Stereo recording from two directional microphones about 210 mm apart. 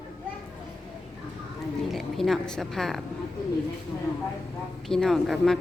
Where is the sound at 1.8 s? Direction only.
Centre (ahead or behind).